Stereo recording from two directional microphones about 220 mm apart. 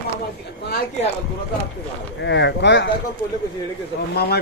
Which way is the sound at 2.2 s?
55° left (ahead or behind).